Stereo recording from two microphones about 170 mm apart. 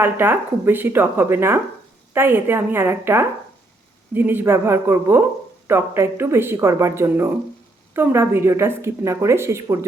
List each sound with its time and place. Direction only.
0.0 s a woman's voice: 10° right (ahead or behind)